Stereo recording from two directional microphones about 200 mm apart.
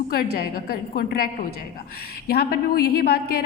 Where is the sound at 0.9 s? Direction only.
50° left (ahead or behind).